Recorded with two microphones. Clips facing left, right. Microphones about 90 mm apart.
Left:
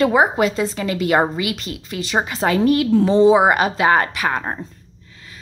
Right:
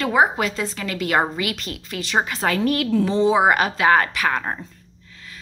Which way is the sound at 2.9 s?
30° left (ahead or behind).